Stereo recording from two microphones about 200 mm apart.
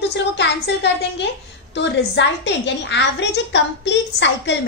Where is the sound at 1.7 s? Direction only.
60° left (ahead or behind).